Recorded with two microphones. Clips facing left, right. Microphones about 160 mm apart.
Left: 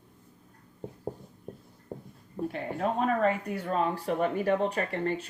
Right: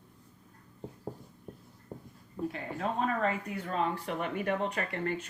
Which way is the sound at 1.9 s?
45° left (ahead or behind).